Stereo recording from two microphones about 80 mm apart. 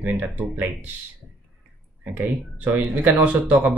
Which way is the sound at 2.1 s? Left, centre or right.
Right.